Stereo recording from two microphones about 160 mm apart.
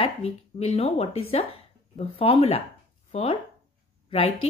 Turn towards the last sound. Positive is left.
turn(degrees=35)  # may be behind; listen again after turning